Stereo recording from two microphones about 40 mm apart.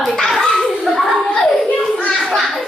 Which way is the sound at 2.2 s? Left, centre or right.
Centre.